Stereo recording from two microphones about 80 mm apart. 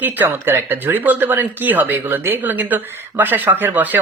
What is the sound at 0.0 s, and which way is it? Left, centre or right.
Speech, right.